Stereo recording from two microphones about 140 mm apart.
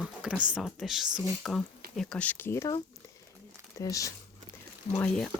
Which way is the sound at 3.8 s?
25° left (ahead or behind).